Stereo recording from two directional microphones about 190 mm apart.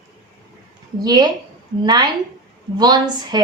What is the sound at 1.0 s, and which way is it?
Speech, 20° right (ahead or behind).